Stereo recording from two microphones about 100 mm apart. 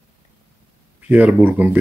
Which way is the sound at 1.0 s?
15° right (ahead or behind).